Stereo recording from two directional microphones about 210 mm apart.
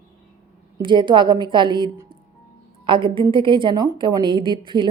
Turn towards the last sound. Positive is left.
turn(degrees=-20)  # may be behind; listen again after turning